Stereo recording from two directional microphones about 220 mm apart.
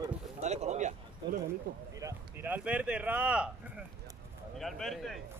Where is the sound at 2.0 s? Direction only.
10° right (ahead or behind).